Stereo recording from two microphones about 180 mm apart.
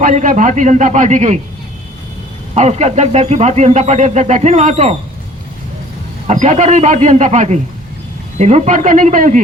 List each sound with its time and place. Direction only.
0.0 s a man's voice: 45° right (ahead or behind)
2.6 s speech: 35° right (ahead or behind)
6.2 s a man's voice: 40° right (ahead or behind)